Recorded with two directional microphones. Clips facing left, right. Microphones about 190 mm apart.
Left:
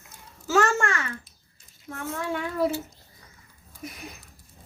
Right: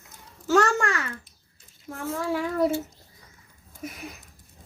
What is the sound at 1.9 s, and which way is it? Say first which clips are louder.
Speech: right 3 dB; centre (ahead or behind).